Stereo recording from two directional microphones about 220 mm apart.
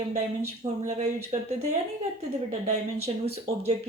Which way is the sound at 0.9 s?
30° right (ahead or behind).